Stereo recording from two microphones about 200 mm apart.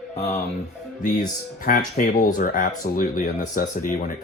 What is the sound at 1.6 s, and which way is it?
Speech, 45° left (ahead or behind).